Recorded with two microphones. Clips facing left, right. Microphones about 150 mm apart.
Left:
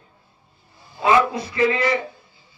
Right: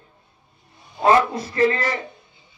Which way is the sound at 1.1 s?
45° right (ahead or behind).